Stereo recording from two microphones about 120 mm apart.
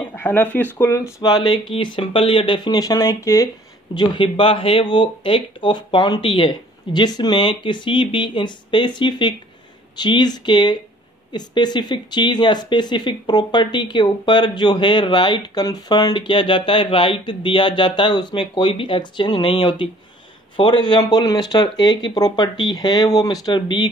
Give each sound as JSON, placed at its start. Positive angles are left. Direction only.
{"t": 0.1, "sound": "speech", "side_deg": 15}
{"t": 1.2, "sound": "speech", "side_deg": 35}
{"t": 3.9, "sound": "speech", "side_deg": 40}